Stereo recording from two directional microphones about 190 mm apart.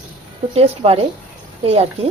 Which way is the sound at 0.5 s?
30° right (ahead or behind).